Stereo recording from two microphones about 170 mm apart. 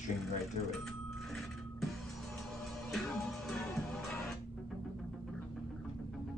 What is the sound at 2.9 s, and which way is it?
Music, centre (ahead or behind).